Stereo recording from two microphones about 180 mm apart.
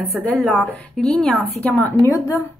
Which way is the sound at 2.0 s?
15° left (ahead or behind).